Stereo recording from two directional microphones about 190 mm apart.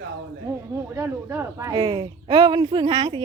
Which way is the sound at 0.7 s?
15° right (ahead or behind).